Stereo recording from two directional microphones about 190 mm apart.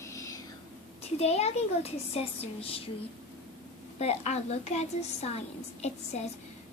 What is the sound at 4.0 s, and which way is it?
A woman's voice, 35° left (ahead or behind).